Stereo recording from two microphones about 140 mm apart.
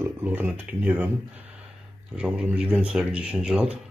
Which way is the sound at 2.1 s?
5° right (ahead or behind).